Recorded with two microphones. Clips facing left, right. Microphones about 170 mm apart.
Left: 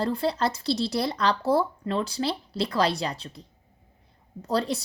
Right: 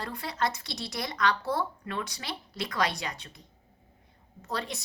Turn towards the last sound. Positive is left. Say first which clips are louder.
# left 9 dB
turn(degrees=35)  # may be behind; listen again after turning